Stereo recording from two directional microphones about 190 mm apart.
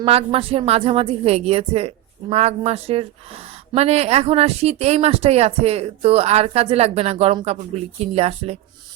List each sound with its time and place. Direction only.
0.0 s speech: 30° right (ahead or behind)